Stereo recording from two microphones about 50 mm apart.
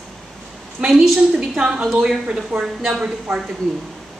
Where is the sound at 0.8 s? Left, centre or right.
Centre.